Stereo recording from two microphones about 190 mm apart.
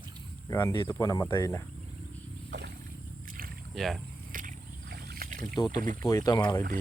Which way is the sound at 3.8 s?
Centre (ahead or behind).